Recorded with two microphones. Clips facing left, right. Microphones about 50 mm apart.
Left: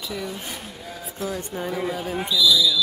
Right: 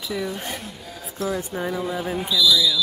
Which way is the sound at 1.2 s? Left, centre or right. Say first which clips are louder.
Right 3 dB; centre.